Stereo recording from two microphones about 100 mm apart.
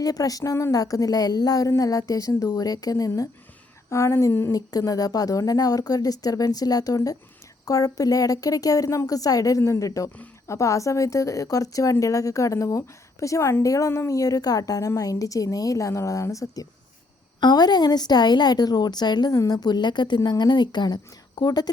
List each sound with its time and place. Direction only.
0.0 s a woman's voice: 40° left (ahead or behind)
4.5 s a woman's voice: 40° left (ahead or behind)
17.4 s a woman's voice: 45° left (ahead or behind)